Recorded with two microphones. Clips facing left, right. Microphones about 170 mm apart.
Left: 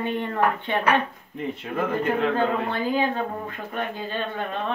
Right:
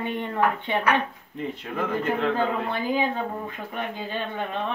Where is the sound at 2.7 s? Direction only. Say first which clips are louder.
Left 1 dB; 10° right (ahead or behind).